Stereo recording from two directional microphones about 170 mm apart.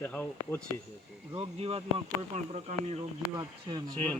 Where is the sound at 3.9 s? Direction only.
5° left (ahead or behind).